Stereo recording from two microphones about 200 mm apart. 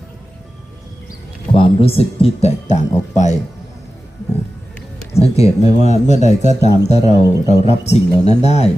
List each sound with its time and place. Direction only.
1.5 s speech: 30° left (ahead or behind)
5.4 s speech: 35° left (ahead or behind)